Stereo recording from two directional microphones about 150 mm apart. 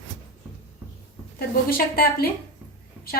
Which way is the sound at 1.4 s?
80° left.